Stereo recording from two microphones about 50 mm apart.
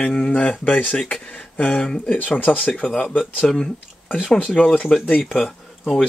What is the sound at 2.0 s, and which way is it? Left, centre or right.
Speech, left.